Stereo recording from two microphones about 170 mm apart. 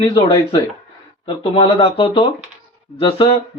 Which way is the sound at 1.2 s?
30° left (ahead or behind).